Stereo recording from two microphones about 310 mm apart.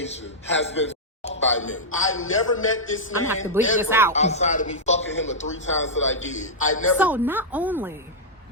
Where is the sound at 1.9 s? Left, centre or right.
Left.